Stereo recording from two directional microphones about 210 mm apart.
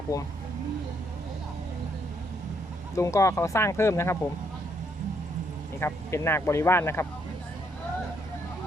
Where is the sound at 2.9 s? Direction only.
15° left (ahead or behind).